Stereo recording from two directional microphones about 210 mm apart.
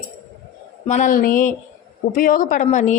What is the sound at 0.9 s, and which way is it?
Speech, 35° left (ahead or behind).